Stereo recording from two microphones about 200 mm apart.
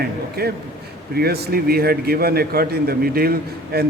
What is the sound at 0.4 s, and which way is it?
A man's voice, 50° right (ahead or behind).